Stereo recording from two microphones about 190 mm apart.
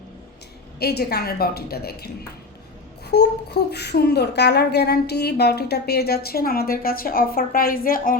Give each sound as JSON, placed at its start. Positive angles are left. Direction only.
{"t": 0.8, "sound": "speech", "side_deg": 55}
{"t": 3.1, "sound": "speech", "side_deg": 60}